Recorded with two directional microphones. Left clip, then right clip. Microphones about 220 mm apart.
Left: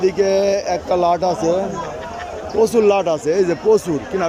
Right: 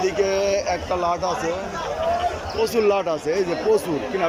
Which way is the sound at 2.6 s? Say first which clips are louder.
Left 6 dB; 15° left (ahead or behind).